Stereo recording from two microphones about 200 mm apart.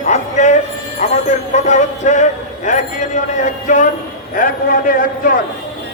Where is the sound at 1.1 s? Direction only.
35° left (ahead or behind).